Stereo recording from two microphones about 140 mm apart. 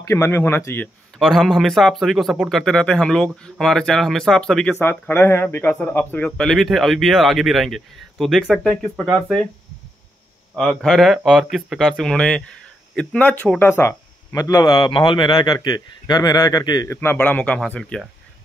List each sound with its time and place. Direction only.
0.0 s speech: 20° left (ahead or behind)
1.2 s speech: centre (ahead or behind)
4.7 s speech: 15° left (ahead or behind)
10.5 s speech: 5° left (ahead or behind); by 16.9 s 30° left (ahead or behind)
16.9 s speech: 15° left (ahead or behind)